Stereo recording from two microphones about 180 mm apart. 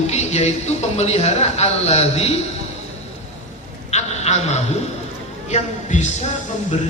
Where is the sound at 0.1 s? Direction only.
40° left (ahead or behind).